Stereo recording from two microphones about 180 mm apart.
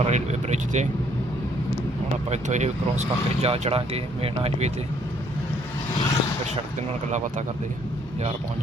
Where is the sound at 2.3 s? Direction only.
40° right (ahead or behind).